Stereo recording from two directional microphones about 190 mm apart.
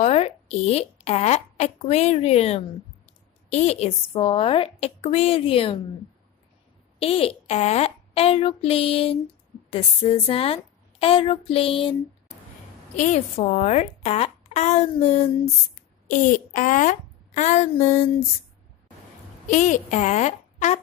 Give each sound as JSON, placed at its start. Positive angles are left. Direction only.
{"t": 0.0, "sound": "a woman's voice", "side_deg": 35}
{"t": 7.0, "sound": "a woman's voice", "side_deg": 30}
{"t": 12.9, "sound": "a woman's voice", "side_deg": 40}
{"t": 19.4, "sound": "a woman's voice", "side_deg": 40}